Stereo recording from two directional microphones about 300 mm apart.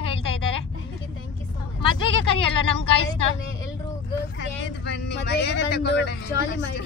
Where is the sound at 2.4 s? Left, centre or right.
Right.